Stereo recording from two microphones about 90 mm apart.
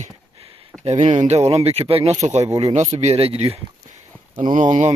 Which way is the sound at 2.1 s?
40° right (ahead or behind).